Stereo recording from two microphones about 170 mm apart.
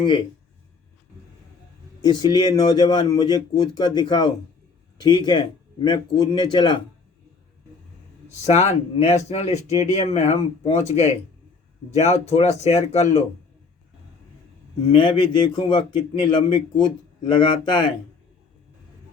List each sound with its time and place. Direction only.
2.0 s a man's voice: 25° left (ahead or behind)
8.5 s speech: 40° left (ahead or behind)
14.9 s a man's voice: 25° left (ahead or behind)